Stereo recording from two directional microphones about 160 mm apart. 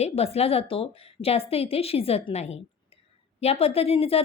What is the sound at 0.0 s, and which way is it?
A woman's voice, 40° left (ahead or behind).